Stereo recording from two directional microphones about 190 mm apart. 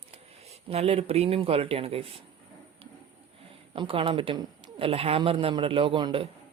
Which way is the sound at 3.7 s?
30° right (ahead or behind).